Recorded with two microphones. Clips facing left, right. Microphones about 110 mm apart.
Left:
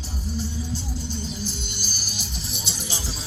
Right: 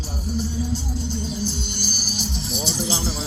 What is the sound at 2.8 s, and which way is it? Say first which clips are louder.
Speech: right 8 dB; 90° right.